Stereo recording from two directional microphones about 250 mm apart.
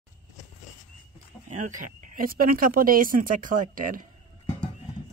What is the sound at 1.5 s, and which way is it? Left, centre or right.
Speech, right.